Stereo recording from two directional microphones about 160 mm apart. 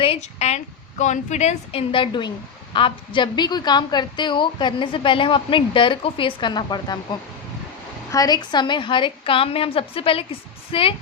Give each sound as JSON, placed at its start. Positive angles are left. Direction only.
{"t": 0.0, "sound": "a woman's voice", "side_deg": 40}